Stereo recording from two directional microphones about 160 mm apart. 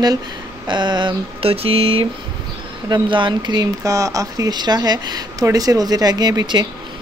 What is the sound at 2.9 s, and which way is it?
Speech, 30° right (ahead or behind).